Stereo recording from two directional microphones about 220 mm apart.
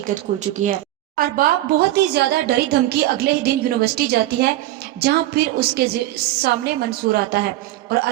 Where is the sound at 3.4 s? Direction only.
45° right (ahead or behind).